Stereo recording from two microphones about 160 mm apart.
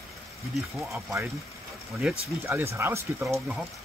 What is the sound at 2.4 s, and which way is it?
Speech, 15° right (ahead or behind).